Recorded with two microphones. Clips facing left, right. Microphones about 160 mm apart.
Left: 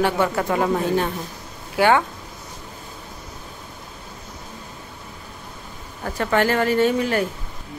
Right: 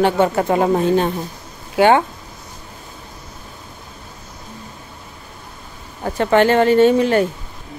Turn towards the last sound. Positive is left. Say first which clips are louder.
# right 6 dB
turn(degrees=-25)  # may be behind; listen again after turning